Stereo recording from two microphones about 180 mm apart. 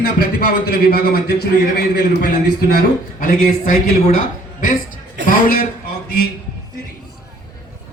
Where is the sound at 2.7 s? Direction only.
50° left (ahead or behind).